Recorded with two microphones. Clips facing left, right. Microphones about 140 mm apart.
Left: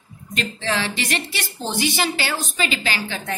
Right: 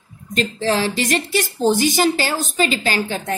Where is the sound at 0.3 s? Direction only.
40° right (ahead or behind).